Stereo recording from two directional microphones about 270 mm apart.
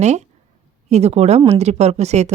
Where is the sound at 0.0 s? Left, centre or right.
Right.